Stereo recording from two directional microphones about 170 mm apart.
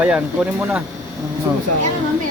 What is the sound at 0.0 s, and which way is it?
Speech, 10° right (ahead or behind).